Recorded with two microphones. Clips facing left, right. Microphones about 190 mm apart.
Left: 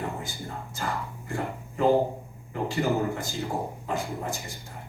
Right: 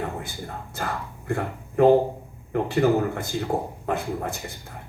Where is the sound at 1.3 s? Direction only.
60° right (ahead or behind).